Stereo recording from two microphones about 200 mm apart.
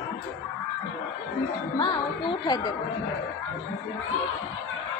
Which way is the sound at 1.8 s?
20° left (ahead or behind).